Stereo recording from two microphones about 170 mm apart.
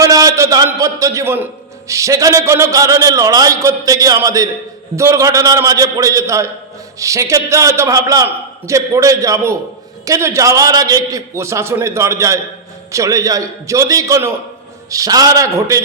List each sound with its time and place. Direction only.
0.0 s a man's voice: 20° right (ahead or behind)